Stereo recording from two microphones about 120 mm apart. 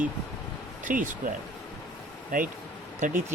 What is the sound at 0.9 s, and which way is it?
Speech, 90° right.